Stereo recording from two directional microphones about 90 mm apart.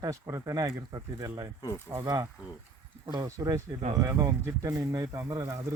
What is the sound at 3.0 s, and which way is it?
Speech, 40° right (ahead or behind).